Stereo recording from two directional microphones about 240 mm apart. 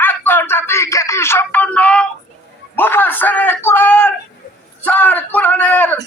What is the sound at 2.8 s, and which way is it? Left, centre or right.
A man's voice, centre.